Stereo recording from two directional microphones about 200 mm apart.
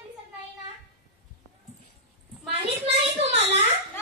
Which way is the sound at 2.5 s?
30° right (ahead or behind).